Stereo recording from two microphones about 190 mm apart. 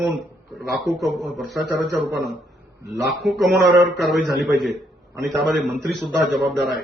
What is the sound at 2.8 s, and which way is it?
Speech, 60° right (ahead or behind).